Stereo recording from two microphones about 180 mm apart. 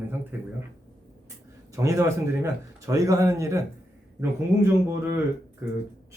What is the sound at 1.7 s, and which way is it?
Speech, 15° right (ahead or behind).